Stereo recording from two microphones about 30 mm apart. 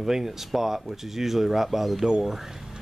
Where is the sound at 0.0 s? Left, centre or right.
Centre.